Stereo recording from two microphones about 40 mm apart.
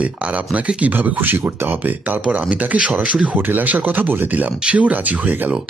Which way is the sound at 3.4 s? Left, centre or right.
Right.